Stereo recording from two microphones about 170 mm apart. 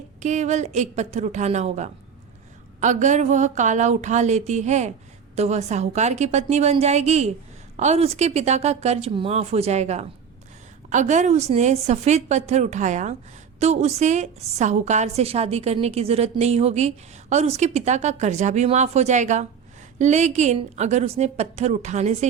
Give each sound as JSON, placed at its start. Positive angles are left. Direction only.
{"t": 0.2, "sound": "a woman's voice", "side_deg": -45}